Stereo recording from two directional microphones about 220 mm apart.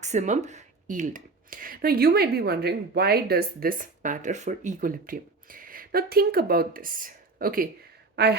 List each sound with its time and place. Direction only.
0.0 s speech: 30° right (ahead or behind); by 8.4 s 50° right (ahead or behind)